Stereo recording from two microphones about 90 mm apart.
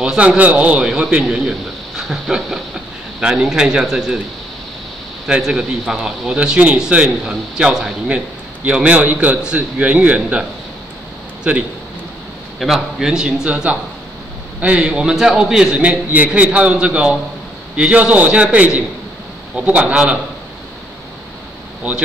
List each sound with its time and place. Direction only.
0.0 s a man's voice: 10° right (ahead or behind)
2.0 s a sound: 5° right (ahead or behind)
3.2 s a man's voice: 10° right (ahead or behind)
5.2 s a man's voice: 5° right (ahead or behind)
12.5 s a man's voice: centre (ahead or behind)